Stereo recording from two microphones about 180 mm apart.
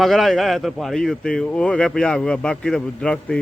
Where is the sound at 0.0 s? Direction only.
Centre (ahead or behind).